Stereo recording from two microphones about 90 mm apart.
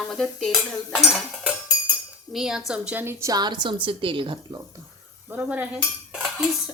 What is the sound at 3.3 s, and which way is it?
Speech, 55° right (ahead or behind).